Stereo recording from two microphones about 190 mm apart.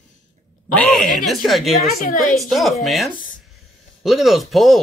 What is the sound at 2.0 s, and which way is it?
Speech, 45° left (ahead or behind).